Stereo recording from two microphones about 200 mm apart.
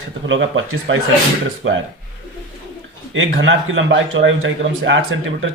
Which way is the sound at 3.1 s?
70° right (ahead or behind).